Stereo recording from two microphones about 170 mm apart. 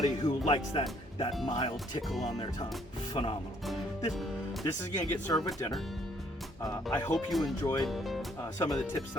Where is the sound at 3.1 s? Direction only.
30° left (ahead or behind).